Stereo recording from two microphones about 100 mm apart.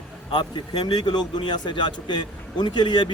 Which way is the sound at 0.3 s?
50° left (ahead or behind).